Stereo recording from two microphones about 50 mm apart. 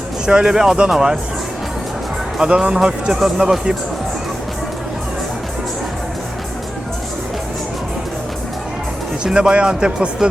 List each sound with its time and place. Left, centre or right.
0.3 s speech: centre
2.4 s speech: centre
9.2 s speech: centre